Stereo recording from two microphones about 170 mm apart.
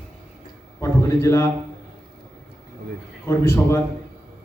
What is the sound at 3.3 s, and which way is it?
Speech, 15° left (ahead or behind).